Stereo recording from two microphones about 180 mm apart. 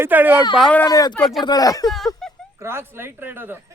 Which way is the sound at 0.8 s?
20° left (ahead or behind).